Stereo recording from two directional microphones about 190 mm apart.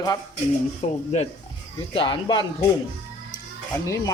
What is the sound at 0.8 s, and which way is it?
Speech, 35° left (ahead or behind).